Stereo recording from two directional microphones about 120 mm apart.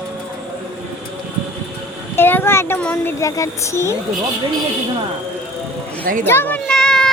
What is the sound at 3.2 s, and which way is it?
Speech, 25° left (ahead or behind).